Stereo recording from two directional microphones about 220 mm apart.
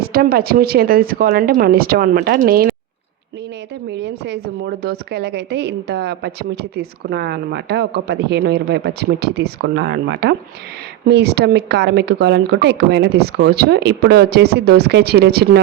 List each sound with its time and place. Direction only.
0.0 s a woman's voice: 40° right (ahead or behind)
3.9 s a woman's voice: 50° right (ahead or behind)